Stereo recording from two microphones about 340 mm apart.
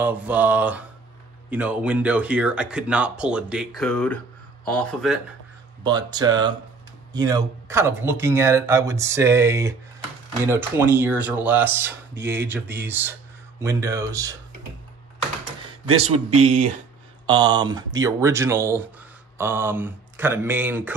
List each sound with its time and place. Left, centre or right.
0.0 s speech: centre
5.9 s speech: centre
15.9 s speech: centre